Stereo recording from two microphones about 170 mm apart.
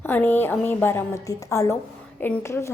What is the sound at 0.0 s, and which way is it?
A woman's voice, 10° left (ahead or behind).